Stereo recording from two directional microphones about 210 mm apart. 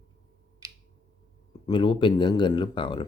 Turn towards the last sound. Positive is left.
turn(degrees=25)  # may be behind; listen again after turning